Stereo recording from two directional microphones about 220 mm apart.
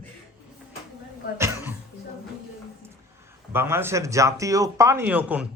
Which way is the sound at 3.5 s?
10° right (ahead or behind).